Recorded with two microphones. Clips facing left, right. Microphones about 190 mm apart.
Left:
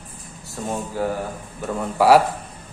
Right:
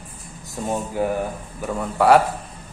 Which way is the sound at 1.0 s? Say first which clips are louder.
Right 1 dB; 15° right (ahead or behind).